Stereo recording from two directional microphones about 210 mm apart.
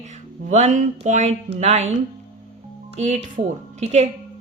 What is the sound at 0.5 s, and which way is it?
Speech, 35° right (ahead or behind).